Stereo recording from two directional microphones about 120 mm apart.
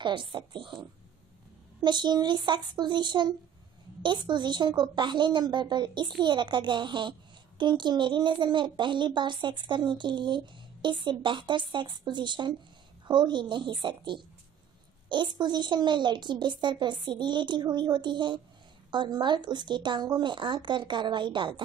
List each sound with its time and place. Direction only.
0.0 s a woman's voice: 40° right (ahead or behind)
1.8 s a woman's voice: 40° right (ahead or behind)